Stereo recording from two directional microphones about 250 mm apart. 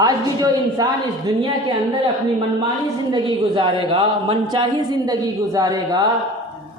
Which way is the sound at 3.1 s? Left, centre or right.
Centre.